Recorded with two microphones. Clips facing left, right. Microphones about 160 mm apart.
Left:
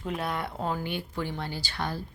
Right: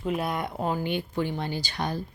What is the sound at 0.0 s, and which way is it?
Speech, 10° right (ahead or behind).